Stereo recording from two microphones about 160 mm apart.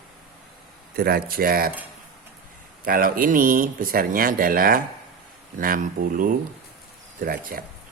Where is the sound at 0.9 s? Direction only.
75° right (ahead or behind).